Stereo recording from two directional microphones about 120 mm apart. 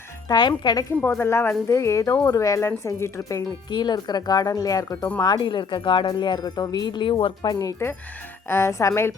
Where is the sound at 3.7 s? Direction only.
40° left (ahead or behind).